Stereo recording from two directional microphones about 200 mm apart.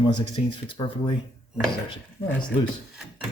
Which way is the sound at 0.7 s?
25° left (ahead or behind).